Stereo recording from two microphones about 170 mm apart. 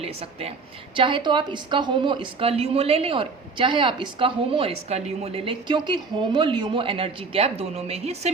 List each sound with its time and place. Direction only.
0.0 s a woman's voice: 35° right (ahead or behind)